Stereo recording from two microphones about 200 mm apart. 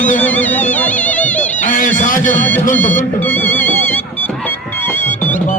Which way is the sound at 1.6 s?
40° left (ahead or behind).